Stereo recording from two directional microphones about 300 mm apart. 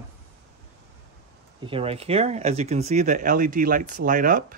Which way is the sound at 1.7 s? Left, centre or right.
Centre.